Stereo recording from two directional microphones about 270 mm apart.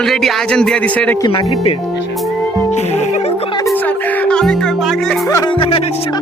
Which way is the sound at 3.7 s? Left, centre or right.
Centre.